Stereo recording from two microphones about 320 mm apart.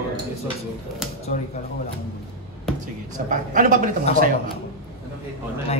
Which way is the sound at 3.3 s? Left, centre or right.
Right.